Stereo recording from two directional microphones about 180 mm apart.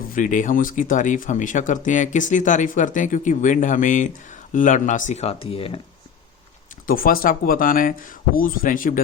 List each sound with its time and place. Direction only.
0.1 s speech: 45° left (ahead or behind); by 5.8 s 30° left (ahead or behind)
6.8 s speech: 55° left (ahead or behind)